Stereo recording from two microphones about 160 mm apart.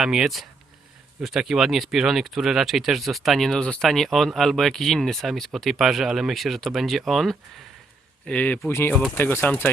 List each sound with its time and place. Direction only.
0.0 s speech: 5° right (ahead or behind); by 9.6 s 15° left (ahead or behind)